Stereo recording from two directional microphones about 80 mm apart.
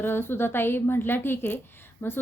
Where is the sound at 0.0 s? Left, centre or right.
Left.